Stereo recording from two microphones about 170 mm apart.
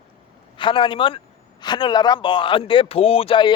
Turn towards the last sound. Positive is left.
turn(degrees=30)  # may be behind; listen again after turning